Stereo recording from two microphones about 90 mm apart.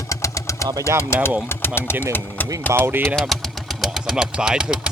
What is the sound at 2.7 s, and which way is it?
Speech, 25° right (ahead or behind).